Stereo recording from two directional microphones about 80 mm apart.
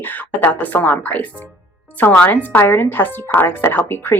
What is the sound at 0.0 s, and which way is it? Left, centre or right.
A woman's voice, left.